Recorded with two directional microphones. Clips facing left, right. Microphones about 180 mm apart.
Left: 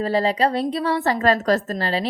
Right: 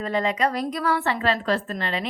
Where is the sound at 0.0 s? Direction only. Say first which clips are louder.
Left 4 dB; 35° left (ahead or behind).